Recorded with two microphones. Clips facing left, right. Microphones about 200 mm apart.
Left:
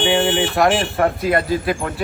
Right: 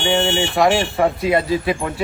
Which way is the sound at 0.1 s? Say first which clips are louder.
Right 3 dB; 5° left (ahead or behind).